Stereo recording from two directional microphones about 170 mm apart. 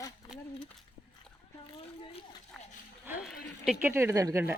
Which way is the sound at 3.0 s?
5° right (ahead or behind).